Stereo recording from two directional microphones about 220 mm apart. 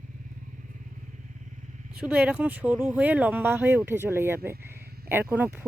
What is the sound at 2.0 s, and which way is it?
Speech, 5° right (ahead or behind).